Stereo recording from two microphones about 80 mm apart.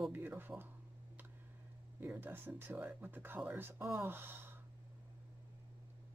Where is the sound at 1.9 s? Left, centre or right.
Right.